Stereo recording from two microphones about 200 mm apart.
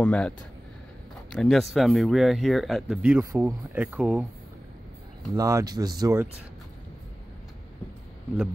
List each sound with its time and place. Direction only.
0.0 s speech: 5° left (ahead or behind)
1.3 s speech: centre (ahead or behind)
5.3 s speech: 15° right (ahead or behind)